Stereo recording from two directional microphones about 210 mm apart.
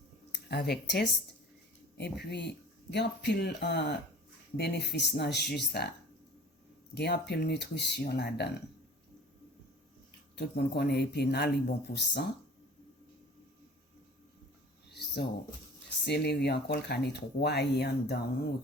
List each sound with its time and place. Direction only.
0.3 s speech: 50° left (ahead or behind)
6.9 s speech: 50° left (ahead or behind)
10.3 s speech: 50° left (ahead or behind)
14.8 s a sound: 50° left (ahead or behind)
16.0 s speech: 50° left (ahead or behind)